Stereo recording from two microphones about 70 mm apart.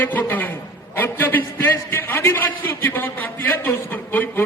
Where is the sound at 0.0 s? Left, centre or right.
Left.